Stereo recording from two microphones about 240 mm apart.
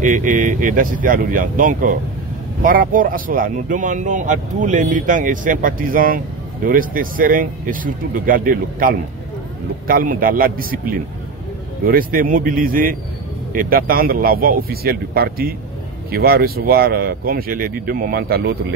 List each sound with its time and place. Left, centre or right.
0.0 s speech: right